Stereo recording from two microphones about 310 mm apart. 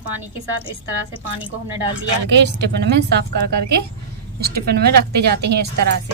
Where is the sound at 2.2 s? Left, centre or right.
Right.